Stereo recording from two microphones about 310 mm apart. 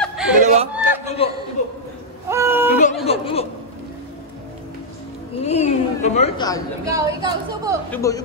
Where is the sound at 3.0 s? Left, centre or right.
Centre.